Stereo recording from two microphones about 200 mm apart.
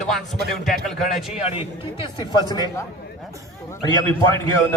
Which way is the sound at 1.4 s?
30° left (ahead or behind).